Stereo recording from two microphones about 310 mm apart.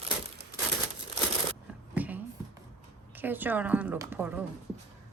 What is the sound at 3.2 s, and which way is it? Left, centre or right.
A woman's voice, centre.